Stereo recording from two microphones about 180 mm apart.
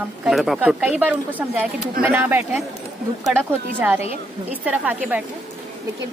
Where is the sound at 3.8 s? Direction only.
10° right (ahead or behind).